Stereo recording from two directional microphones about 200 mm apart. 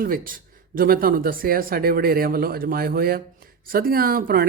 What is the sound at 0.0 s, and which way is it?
Speech, 45° right (ahead or behind).